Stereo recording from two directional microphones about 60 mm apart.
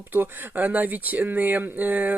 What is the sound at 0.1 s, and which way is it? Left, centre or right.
Speech, right.